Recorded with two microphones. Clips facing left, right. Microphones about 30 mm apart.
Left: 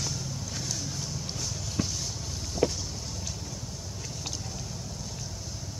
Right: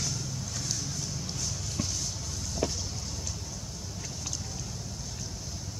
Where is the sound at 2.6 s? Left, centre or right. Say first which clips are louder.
Left 5 dB; centre.